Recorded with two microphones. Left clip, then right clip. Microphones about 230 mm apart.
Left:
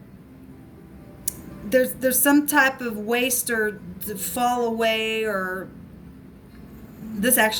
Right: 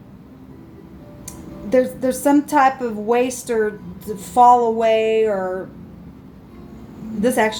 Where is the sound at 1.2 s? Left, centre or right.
Left.